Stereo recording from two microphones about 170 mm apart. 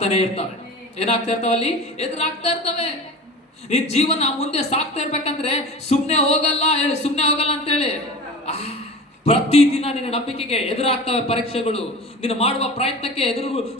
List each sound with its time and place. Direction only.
0.0 s a woman's voice: 40° left (ahead or behind)